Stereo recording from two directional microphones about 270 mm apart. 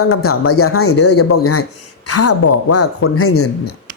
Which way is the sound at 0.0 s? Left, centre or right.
Left.